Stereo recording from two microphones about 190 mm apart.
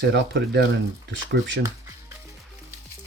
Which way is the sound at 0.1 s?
70° right (ahead or behind).